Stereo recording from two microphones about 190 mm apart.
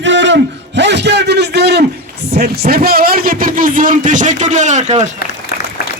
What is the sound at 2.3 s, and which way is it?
A man's voice, 55° right (ahead or behind).